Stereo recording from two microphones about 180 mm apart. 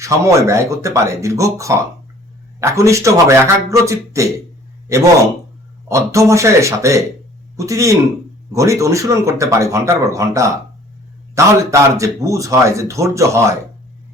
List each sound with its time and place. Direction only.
0.0 s speech: 15° right (ahead or behind)
5.9 s speech: 15° right (ahead or behind)